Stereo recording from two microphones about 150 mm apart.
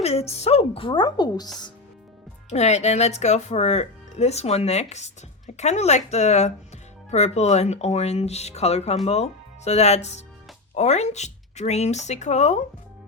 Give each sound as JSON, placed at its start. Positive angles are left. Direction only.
{"t": 0.0, "sound": "a woman's voice", "side_deg": 45}
{"t": 2.5, "sound": "speech", "side_deg": 45}